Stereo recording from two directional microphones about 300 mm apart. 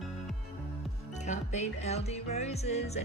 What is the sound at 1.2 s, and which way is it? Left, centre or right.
Music, left.